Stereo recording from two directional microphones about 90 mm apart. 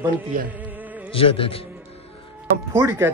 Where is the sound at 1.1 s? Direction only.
90° left.